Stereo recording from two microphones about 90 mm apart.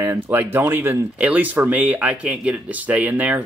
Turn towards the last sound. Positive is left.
turn(degrees=-20)  # may be behind; listen again after turning